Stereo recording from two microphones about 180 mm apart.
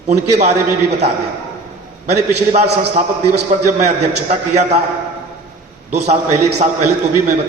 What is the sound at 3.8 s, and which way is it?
A man's voice, 40° right (ahead or behind).